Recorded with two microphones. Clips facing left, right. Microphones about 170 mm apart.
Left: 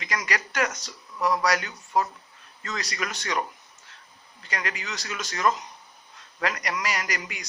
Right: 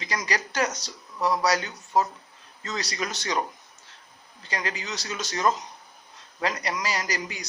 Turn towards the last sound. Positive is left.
turn(degrees=-30)  # may be behind; listen again after turning